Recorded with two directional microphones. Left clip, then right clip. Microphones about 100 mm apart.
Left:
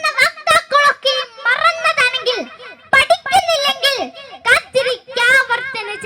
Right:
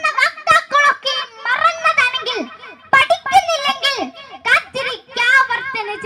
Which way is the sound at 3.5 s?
35° left (ahead or behind).